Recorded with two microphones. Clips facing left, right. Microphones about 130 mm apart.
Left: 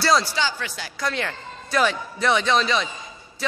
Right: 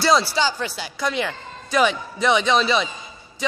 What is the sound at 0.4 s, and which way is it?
Speech, 35° right (ahead or behind).